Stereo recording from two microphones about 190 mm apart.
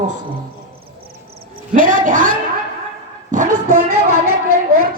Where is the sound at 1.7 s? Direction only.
45° right (ahead or behind).